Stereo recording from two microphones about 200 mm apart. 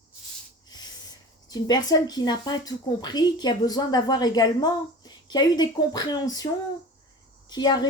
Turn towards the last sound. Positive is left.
turn(degrees=20)  # may be behind; listen again after turning